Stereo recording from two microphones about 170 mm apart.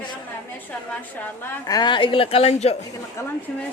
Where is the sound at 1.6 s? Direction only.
25° left (ahead or behind).